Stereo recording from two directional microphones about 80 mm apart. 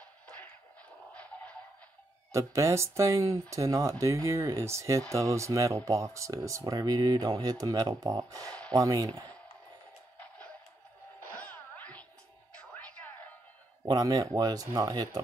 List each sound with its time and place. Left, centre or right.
1.1 s music: centre
2.3 s speech: right
11.3 s music: left
13.8 s speech: right